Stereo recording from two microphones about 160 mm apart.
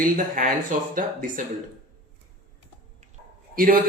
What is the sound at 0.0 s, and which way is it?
Speech, 55° right (ahead or behind).